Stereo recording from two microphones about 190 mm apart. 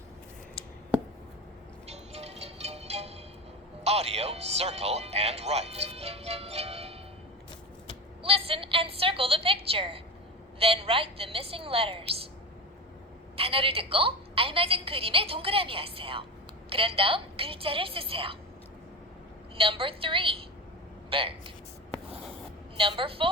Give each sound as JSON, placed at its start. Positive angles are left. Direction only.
{"t": 1.9, "sound": "music", "side_deg": -35}
{"t": 3.8, "sound": "speech", "side_deg": -35}
{"t": 8.2, "sound": "a woman's voice", "side_deg": -30}
{"t": 13.3, "sound": "a woman's voice", "side_deg": -30}
{"t": 19.5, "sound": "a woman's voice", "side_deg": -30}
{"t": 22.8, "sound": "a woman's voice", "side_deg": -25}